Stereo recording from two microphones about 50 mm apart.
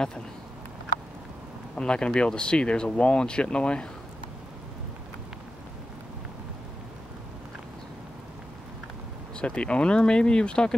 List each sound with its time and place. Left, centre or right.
1.8 s speech: centre
9.4 s speech: left